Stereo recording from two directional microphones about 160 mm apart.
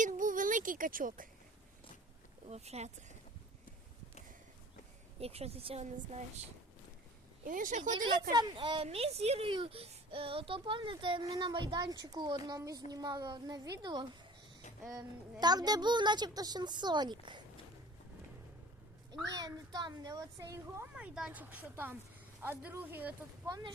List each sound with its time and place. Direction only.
0.0 s a sound: 55° right (ahead or behind)
2.5 s speech: 40° right (ahead or behind)
5.2 s a child's voice: 40° right (ahead or behind)
7.4 s speech: 55° right (ahead or behind)
8.3 s a child's voice: 25° right (ahead or behind)
19.2 s a woman's voice: 25° right (ahead or behind)
20.9 s speech: 5° right (ahead or behind)
23.5 s a woman's voice: 25° right (ahead or behind)